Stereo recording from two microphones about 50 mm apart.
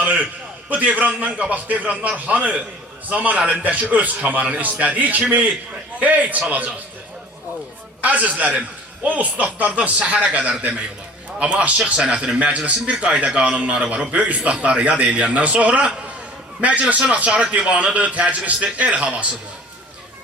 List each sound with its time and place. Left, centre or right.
0.0 s a sound: right
0.7 s a man's voice: right
8.0 s a man's voice: right